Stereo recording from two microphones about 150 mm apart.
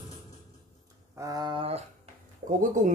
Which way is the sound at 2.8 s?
55° right (ahead or behind).